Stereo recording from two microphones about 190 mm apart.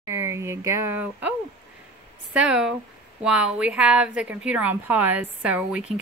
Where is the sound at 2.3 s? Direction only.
5° right (ahead or behind).